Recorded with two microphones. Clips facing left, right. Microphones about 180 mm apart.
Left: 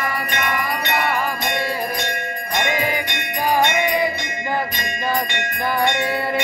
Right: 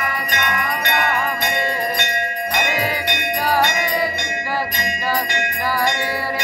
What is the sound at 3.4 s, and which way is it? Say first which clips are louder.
Music: left 2 dB; 15° left (ahead or behind).